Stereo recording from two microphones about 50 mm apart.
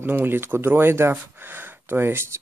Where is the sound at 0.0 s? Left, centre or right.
Right.